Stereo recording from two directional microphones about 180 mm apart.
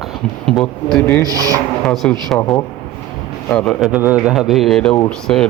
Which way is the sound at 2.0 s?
5° left (ahead or behind).